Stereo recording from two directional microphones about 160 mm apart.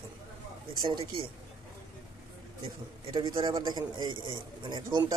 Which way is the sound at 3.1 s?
30° right (ahead or behind).